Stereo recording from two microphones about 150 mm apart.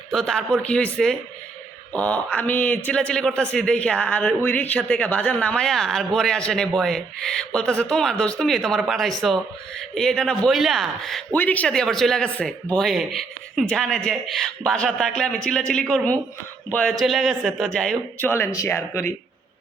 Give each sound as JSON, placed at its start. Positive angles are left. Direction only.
{"t": 0.1, "sound": "a man's voice", "side_deg": 5}